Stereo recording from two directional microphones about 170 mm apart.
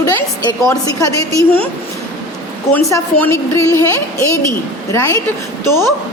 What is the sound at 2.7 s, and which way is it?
A woman's voice, 15° left (ahead or behind).